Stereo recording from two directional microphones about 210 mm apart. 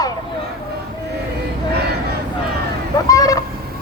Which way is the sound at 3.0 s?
15° left (ahead or behind).